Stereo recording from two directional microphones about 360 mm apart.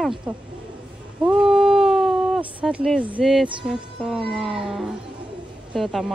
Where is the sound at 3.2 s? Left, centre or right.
Centre.